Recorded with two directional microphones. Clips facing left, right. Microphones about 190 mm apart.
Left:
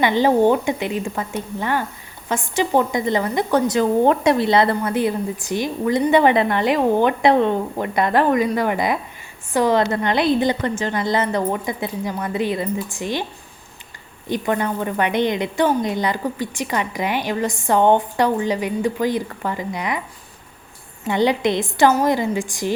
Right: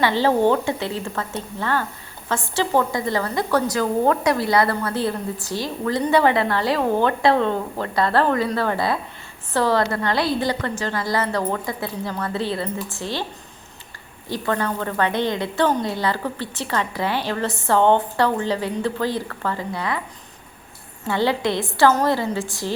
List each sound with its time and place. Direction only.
0.0 s a woman's voice: 15° left (ahead or behind)
14.3 s a woman's voice: 15° left (ahead or behind)
21.1 s a woman's voice: 20° left (ahead or behind)